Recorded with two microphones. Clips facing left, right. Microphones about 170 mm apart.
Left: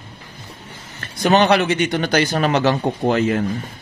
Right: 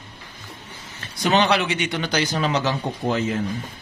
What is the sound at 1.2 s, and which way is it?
Speech, 50° left (ahead or behind).